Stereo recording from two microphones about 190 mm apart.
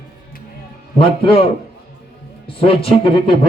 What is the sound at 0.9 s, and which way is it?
Speech, 30° left (ahead or behind).